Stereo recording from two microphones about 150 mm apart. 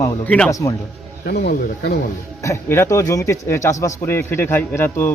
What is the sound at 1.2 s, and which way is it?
Speech, 90° left.